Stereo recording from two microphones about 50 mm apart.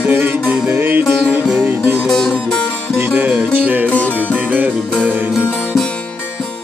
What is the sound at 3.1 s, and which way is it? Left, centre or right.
Music, right.